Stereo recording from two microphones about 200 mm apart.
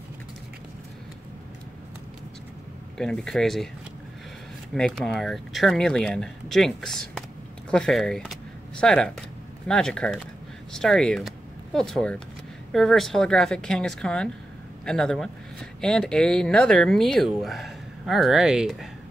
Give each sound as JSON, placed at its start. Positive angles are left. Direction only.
{"t": 3.0, "sound": "speech", "side_deg": 5}
{"t": 4.7, "sound": "speech", "side_deg": 5}